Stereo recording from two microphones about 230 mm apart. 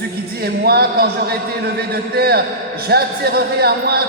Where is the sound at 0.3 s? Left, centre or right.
Right.